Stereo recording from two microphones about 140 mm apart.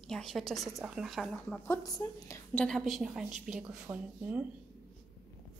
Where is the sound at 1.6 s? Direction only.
25° left (ahead or behind).